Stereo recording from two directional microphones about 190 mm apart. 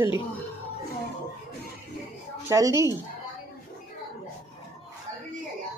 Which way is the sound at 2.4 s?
15° right (ahead or behind).